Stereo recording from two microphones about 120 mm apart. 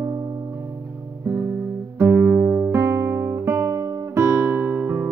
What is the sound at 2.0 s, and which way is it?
Guitar, 15° right (ahead or behind).